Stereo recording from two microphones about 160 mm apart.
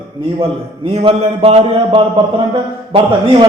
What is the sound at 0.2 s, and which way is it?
A man's voice, 35° right (ahead or behind).